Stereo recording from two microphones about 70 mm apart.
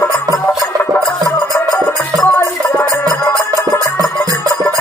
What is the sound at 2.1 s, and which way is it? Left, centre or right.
Music, right.